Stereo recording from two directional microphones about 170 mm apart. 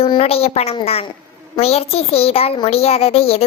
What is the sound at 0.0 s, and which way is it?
A woman's voice, 35° left (ahead or behind).